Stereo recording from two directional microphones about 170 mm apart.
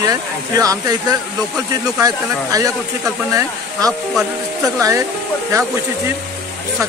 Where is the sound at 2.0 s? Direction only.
20° right (ahead or behind).